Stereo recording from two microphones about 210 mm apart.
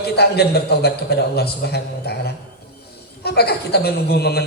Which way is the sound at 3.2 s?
50° left (ahead or behind).